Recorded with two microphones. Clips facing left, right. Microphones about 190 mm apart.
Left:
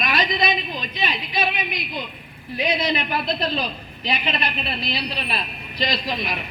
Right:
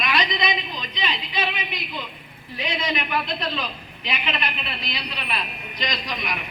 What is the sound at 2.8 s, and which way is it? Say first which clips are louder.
A woman's voice: left 3 dB; 35° left (ahead or behind).